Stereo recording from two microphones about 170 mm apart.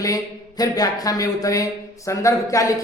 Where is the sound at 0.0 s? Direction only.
20° left (ahead or behind).